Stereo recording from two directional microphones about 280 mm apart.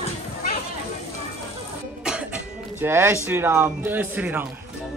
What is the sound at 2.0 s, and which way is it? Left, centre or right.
Cough, centre.